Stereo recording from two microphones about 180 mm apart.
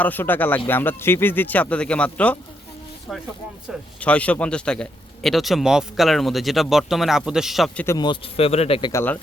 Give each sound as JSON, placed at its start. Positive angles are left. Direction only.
{"t": 0.0, "sound": "speech", "side_deg": 10}
{"t": 3.1, "sound": "a man's voice", "side_deg": -5}
{"t": 4.0, "sound": "a man's voice", "side_deg": 5}
{"t": 7.9, "sound": "a man's voice", "side_deg": 25}
{"t": 8.9, "sound": "speech", "side_deg": 15}